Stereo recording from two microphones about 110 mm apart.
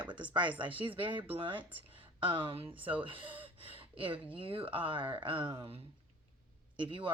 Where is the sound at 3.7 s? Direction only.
55° right (ahead or behind).